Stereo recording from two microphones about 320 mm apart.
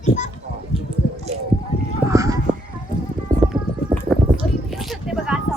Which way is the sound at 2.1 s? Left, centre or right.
Centre.